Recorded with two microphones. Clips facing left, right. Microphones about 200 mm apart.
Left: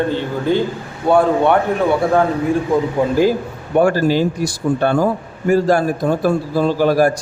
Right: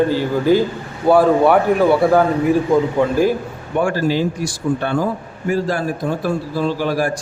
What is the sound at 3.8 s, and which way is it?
Speech, 40° left (ahead or behind).